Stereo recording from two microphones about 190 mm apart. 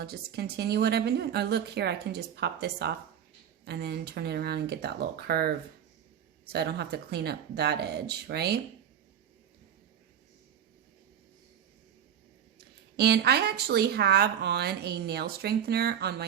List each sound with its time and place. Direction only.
0.0 s speech: 55° right (ahead or behind)
12.5 s speech: 60° right (ahead or behind)